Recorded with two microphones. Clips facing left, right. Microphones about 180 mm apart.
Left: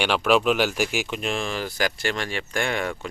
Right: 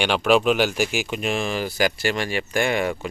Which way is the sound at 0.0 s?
Centre (ahead or behind).